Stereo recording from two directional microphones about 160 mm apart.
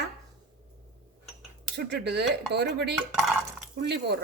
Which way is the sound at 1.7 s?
90° right.